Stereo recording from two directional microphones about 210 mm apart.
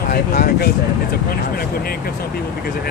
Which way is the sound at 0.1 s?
45° left (ahead or behind).